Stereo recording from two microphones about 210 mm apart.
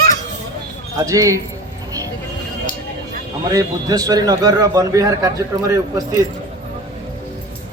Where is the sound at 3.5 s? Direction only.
15° right (ahead or behind).